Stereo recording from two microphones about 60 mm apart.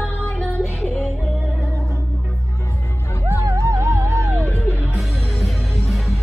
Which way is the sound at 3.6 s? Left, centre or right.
Right.